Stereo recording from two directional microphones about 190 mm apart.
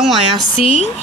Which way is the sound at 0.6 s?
30° left (ahead or behind).